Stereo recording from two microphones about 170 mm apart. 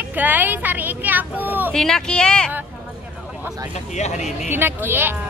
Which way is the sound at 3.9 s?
40° left (ahead or behind).